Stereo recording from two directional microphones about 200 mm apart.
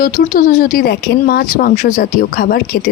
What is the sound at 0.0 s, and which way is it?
Speech, 45° left (ahead or behind).